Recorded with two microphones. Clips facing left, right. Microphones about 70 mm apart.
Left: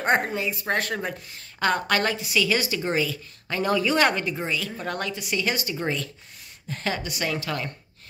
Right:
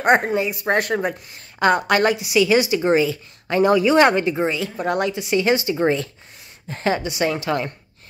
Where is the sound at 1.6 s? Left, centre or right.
Centre.